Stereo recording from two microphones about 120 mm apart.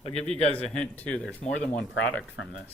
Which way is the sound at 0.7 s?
10° left (ahead or behind).